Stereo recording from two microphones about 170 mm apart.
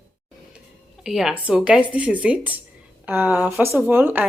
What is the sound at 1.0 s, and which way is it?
A woman's voice, 5° right (ahead or behind).